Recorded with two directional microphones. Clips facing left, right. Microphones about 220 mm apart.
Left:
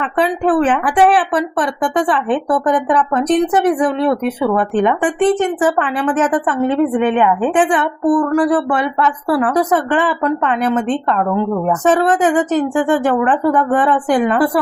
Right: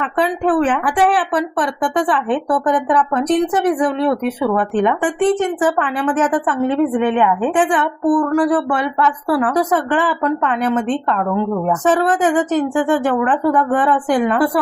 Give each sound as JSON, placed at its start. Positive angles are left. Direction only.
{"t": 0.2, "sound": "a woman's voice", "side_deg": 20}
{"t": 4.5, "sound": "a woman's voice", "side_deg": 25}
{"t": 12.7, "sound": "a woman's voice", "side_deg": 25}